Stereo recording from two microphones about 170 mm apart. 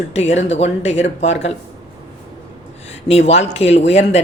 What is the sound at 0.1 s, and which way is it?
Speech, 40° left (ahead or behind).